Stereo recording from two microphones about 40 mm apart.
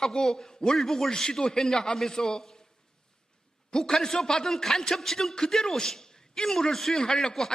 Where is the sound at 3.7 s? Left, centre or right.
Centre.